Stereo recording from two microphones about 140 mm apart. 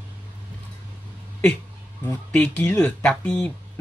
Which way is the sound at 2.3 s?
10° left (ahead or behind).